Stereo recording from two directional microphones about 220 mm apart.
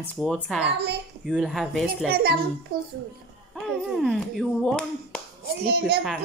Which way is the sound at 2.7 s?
45° right (ahead or behind).